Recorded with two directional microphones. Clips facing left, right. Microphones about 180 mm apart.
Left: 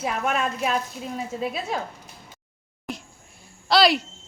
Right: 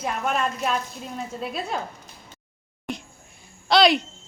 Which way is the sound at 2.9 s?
Centre (ahead or behind).